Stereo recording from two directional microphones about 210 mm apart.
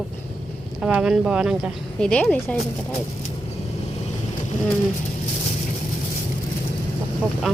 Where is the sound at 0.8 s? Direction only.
5° right (ahead or behind).